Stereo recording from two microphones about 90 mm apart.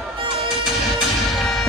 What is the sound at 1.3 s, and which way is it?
Music, centre (ahead or behind).